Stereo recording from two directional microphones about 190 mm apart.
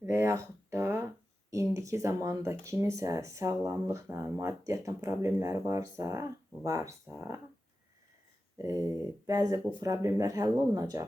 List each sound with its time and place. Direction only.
0.0 s a sound: 15° right (ahead or behind)
1.5 s speech: 15° right (ahead or behind)
8.5 s speech: 15° right (ahead or behind)